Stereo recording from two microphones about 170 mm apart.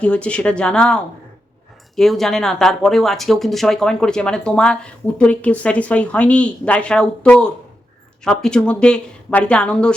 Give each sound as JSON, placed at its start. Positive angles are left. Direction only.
{"t": 0.0, "sound": "speech", "side_deg": 5}